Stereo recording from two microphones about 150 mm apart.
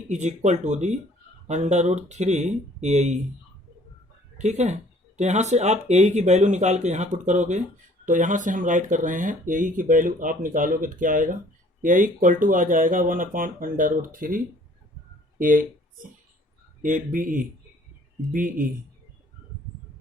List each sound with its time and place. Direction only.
0.1 s speech: 50° right (ahead or behind)
4.4 s speech: 50° right (ahead or behind)
16.8 s speech: 60° right (ahead or behind)